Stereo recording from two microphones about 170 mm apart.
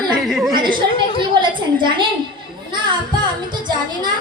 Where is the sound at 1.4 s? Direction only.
30° right (ahead or behind).